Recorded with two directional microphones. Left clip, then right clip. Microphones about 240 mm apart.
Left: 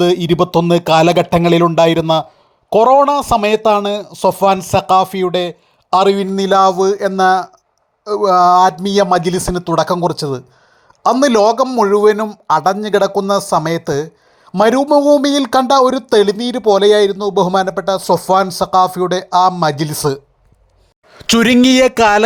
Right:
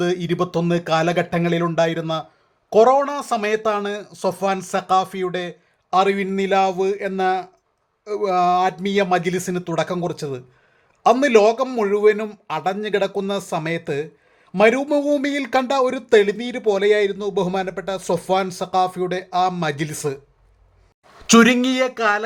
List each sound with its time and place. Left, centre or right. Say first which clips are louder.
0.0 s a man's voice: left 9 dB; centre
6.1 s speech: left 7 dB; centre
21.2 s speech: left 4 dB; left